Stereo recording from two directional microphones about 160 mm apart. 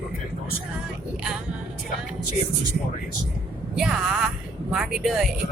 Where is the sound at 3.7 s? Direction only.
5° right (ahead or behind).